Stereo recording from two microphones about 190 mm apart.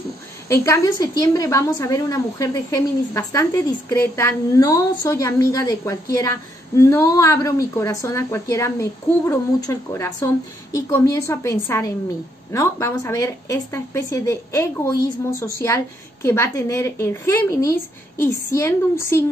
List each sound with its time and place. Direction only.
0.5 s a woman's voice: 15° left (ahead or behind)